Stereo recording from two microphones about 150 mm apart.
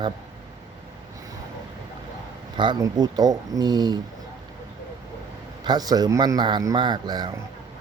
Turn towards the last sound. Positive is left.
turn(degrees=-30)  # may be behind; listen again after turning